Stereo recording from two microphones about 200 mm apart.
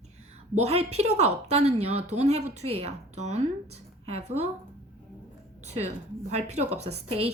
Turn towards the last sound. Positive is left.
turn(degrees=-30)  # may be behind; listen again after turning